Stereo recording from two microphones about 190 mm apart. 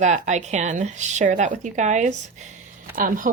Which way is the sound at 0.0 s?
40° right (ahead or behind).